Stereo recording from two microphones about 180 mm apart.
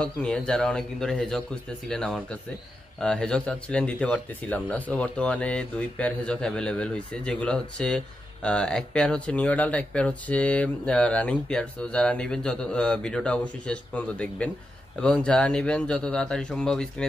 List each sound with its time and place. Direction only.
0.0 s speech: 5° left (ahead or behind)